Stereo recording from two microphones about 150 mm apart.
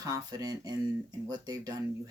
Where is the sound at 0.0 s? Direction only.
25° right (ahead or behind).